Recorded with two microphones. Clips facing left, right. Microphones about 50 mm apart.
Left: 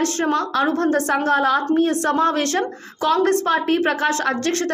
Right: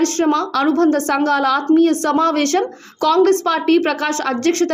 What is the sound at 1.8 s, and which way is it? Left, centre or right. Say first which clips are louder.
Speech: right 3 dB; right.